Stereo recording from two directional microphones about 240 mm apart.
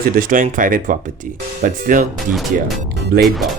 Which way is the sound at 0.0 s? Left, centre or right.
Right.